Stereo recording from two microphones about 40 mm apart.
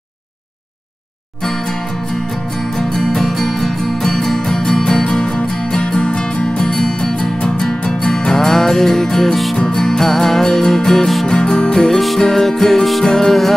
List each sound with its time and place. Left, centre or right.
1.4 s music: centre